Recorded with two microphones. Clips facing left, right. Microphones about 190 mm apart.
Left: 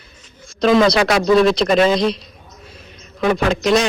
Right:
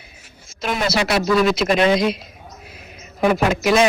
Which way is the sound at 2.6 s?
65° right (ahead or behind).